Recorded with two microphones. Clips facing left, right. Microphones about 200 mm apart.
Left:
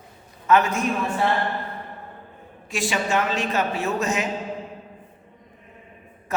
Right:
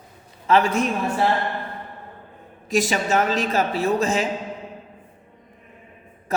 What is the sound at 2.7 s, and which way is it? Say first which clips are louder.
A woman's voice: right 3 dB; 40° right (ahead or behind).